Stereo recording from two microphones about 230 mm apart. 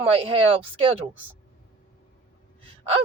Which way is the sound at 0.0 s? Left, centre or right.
Right.